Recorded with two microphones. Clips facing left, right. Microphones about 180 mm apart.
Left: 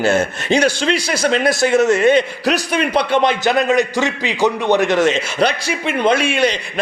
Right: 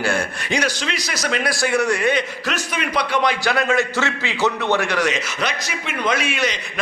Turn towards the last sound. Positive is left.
turn(degrees=30)  # may be behind; listen again after turning